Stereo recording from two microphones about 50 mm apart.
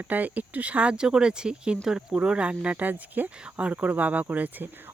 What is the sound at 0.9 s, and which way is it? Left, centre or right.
Speech, centre.